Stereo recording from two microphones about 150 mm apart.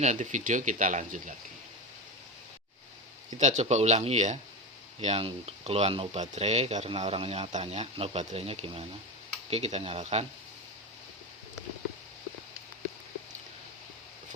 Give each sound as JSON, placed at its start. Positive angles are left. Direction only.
{"t": 0.0, "sound": "speech", "side_deg": -55}
{"t": 3.3, "sound": "speech", "side_deg": -50}
{"t": 4.9, "sound": "speech", "side_deg": -40}